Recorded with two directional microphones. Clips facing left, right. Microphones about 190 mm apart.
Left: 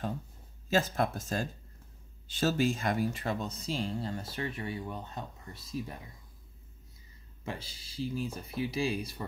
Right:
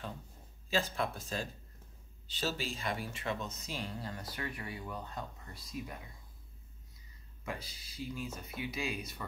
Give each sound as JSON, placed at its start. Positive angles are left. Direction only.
{"t": 0.7, "sound": "speech", "side_deg": 45}
{"t": 7.4, "sound": "speech", "side_deg": 30}